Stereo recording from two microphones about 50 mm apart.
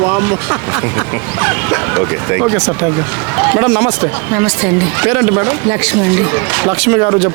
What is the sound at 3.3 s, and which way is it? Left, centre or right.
Speech, right.